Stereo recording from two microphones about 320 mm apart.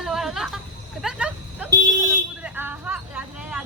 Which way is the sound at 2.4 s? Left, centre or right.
Centre.